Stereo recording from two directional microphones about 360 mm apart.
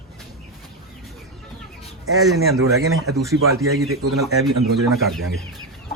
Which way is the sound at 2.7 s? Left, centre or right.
Right.